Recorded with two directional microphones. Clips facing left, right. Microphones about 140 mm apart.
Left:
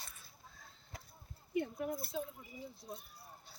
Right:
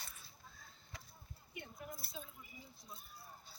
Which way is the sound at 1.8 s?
60° left (ahead or behind).